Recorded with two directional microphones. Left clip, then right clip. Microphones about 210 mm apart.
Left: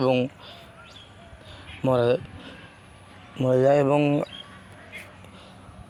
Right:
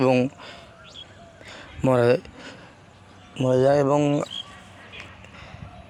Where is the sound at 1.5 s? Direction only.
45° right (ahead or behind).